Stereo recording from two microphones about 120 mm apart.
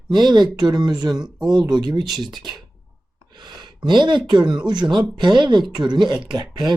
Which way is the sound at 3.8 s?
40° right (ahead or behind).